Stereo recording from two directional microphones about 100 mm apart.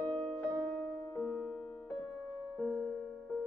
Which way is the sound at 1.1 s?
15° left (ahead or behind).